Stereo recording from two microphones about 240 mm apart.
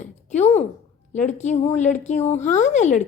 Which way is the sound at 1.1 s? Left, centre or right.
Left.